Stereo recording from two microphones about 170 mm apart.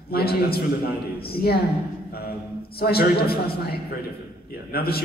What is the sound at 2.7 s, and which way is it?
A man's voice, 65° left (ahead or behind).